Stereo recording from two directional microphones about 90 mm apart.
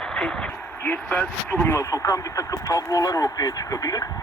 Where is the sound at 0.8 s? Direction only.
20° left (ahead or behind).